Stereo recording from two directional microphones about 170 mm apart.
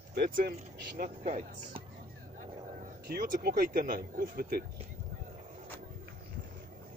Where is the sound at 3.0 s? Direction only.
55° right (ahead or behind).